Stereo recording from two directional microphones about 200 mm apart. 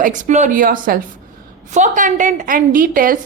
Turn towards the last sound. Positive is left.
turn(degrees=-45)  # may be behind; listen again after turning